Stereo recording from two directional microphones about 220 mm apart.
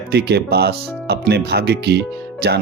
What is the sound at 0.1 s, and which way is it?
Speech, 50° right (ahead or behind).